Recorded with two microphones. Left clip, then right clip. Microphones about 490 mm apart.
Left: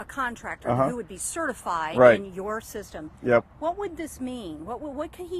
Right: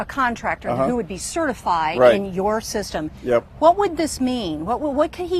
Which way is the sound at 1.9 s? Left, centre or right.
Left.